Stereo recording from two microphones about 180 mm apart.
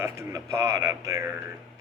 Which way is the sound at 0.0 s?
15° right (ahead or behind).